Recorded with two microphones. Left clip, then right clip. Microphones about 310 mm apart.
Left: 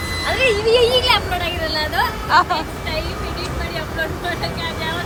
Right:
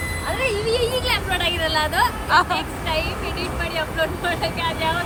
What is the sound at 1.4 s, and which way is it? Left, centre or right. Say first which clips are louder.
A woman's voice: right 1 dB; centre.